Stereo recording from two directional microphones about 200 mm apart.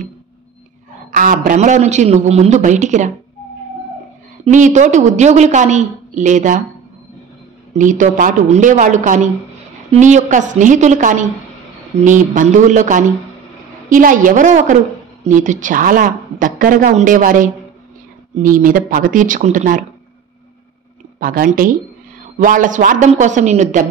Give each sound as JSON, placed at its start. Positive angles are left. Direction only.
{"t": 1.1, "sound": "a woman's voice", "side_deg": -40}
{"t": 4.5, "sound": "a woman's voice", "side_deg": -40}
{"t": 7.7, "sound": "a woman's voice", "side_deg": -40}
{"t": 21.2, "sound": "a woman's voice", "side_deg": -45}